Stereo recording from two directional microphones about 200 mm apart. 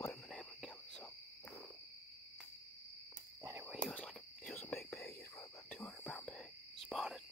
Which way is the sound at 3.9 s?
5° left (ahead or behind).